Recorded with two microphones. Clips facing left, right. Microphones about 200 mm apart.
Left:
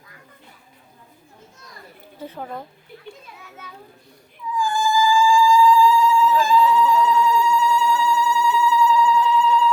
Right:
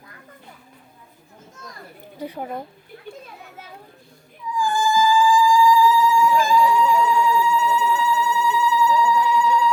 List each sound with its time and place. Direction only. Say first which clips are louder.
2.1 s a woman's voice: right 3 dB; 15° right (ahead or behind)
4.6 s music: right 1 dB; 20° right (ahead or behind)